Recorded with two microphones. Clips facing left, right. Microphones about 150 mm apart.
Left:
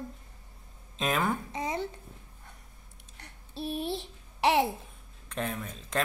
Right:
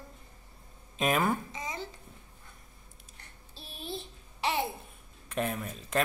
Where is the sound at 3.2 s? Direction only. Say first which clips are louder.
Left 15 dB; 65° left (ahead or behind).